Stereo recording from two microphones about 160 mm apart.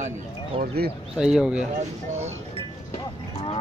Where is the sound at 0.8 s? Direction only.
75° right (ahead or behind).